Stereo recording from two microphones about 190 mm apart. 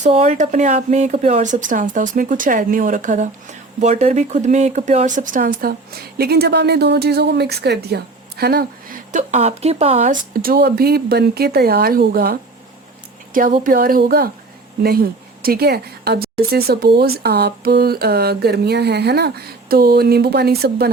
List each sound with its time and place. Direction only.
0.0 s a woman's voice: 35° right (ahead or behind); by 20.9 s 55° right (ahead or behind)